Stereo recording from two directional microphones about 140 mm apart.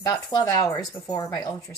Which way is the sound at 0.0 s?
30° left (ahead or behind).